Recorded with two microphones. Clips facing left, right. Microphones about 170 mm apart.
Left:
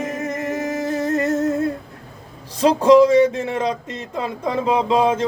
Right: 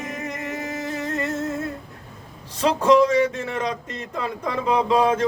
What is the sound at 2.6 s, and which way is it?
Speech, 30° left (ahead or behind).